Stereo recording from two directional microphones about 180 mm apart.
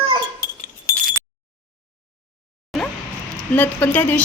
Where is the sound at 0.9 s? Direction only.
20° left (ahead or behind).